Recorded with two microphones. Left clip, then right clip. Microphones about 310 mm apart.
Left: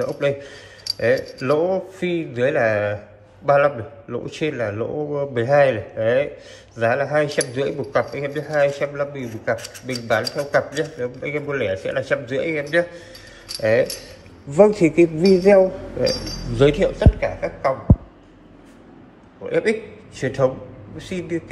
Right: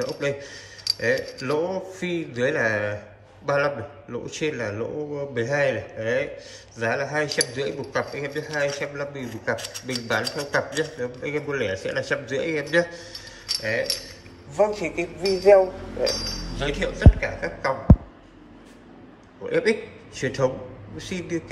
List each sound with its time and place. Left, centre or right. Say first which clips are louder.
0.0 s a man's voice: left 5 dB; centre
13.6 s speech: left 9 dB; centre
14.5 s speech: left 8 dB; centre
16.5 s a man's voice: left 11 dB; centre
19.4 s a man's voice: left 2 dB; centre